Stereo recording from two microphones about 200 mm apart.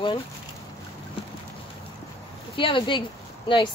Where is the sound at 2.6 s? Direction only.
25° left (ahead or behind).